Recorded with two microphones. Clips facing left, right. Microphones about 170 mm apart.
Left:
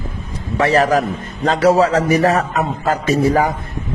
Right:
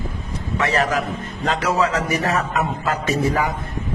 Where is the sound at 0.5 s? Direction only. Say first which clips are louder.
Left 6 dB; 35° left (ahead or behind).